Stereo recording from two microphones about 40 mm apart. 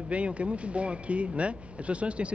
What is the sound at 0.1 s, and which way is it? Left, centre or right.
Speech, right.